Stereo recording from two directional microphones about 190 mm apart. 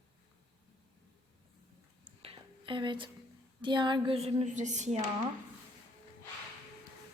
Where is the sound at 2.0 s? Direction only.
30° right (ahead or behind).